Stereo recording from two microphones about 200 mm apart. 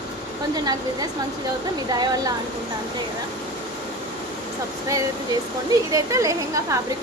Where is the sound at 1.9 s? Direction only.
20° right (ahead or behind).